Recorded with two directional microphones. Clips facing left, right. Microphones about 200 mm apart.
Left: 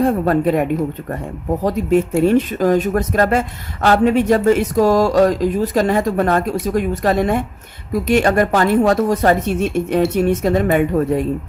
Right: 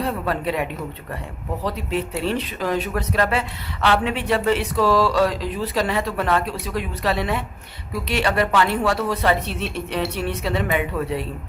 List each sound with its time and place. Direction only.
0.0 s speech: 45° left (ahead or behind)